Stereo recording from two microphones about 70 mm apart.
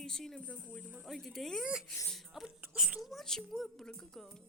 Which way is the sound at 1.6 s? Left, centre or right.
Centre.